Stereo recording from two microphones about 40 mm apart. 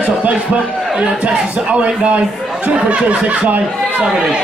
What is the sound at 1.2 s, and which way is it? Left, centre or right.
A man's voice, right.